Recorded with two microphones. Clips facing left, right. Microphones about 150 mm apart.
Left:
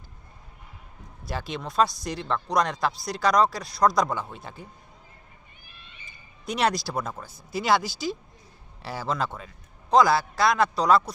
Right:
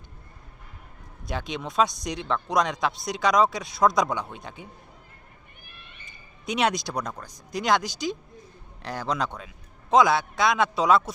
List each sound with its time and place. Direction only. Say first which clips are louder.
1.3 s speech: right 1 dB; 5° left (ahead or behind)
5.6 s cat: right 2 dB; 55° right (ahead or behind)
6.1 s speech: right 1 dB; centre (ahead or behind)